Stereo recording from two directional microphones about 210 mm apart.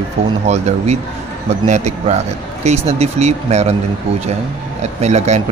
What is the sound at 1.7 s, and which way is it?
Speech, 30° right (ahead or behind).